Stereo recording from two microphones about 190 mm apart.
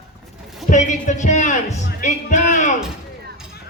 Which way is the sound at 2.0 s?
40° left (ahead or behind).